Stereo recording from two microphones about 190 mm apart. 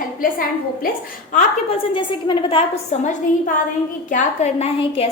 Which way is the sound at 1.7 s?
25° left (ahead or behind).